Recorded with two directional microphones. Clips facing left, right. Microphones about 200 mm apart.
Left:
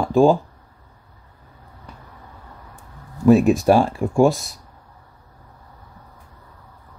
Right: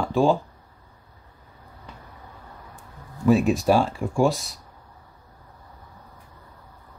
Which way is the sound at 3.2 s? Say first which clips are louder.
Left 5 dB; 50° left (ahead or behind).